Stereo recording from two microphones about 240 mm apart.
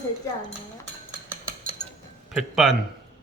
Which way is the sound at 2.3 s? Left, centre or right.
Centre.